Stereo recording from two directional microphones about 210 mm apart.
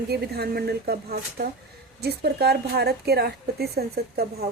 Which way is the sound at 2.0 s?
50° right (ahead or behind).